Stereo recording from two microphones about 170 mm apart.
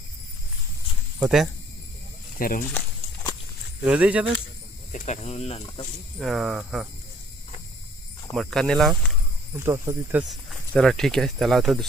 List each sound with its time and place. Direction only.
1.2 s speech: centre (ahead or behind)
2.4 s speech: 55° left (ahead or behind)
3.8 s speech: 10° right (ahead or behind)
4.9 s speech: 45° left (ahead or behind)
6.1 s speech: centre (ahead or behind)
8.4 s speech: centre (ahead or behind)
9.6 s speech: 15° right (ahead or behind)
10.8 s speech: 5° left (ahead or behind)